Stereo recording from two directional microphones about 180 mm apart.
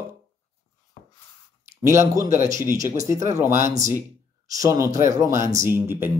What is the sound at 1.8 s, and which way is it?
Speech, 15° right (ahead or behind).